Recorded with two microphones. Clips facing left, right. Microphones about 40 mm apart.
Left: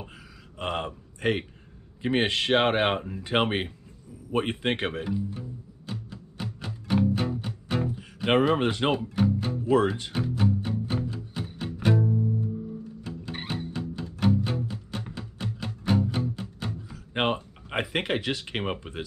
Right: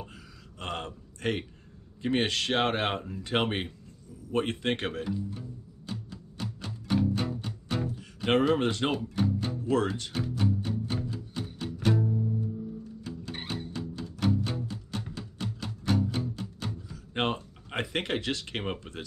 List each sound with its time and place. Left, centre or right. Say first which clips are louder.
0.0 s a sound: left 1 dB; centre
2.0 s speech: left 3 dB; centre
4.3 s music: left 2 dB; centre